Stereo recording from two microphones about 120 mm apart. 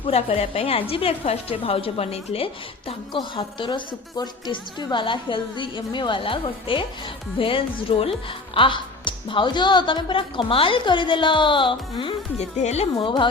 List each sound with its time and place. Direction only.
0.0 s a woman's voice: 55° left (ahead or behind)
12.4 s a woman's voice: 65° left (ahead or behind); by 13.2 s 45° left (ahead or behind)